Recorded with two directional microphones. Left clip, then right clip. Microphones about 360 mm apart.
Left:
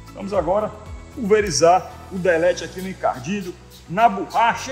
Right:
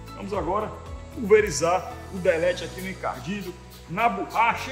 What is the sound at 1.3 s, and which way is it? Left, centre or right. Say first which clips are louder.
A man's voice: left 5 dB; left.